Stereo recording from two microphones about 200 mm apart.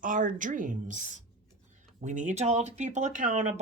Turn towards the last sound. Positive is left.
turn(degrees=-35)  # may be behind; listen again after turning